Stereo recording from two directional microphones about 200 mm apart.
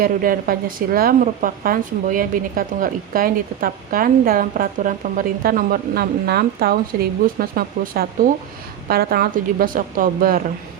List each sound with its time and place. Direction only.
0.0 s speech: 45° right (ahead or behind)